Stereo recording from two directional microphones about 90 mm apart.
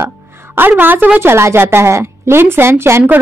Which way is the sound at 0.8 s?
20° right (ahead or behind).